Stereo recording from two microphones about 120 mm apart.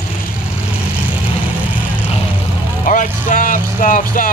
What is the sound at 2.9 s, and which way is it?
Speech, 90° left.